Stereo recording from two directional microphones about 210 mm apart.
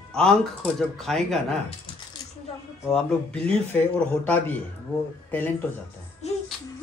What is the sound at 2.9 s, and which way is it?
A man's voice, 5° left (ahead or behind).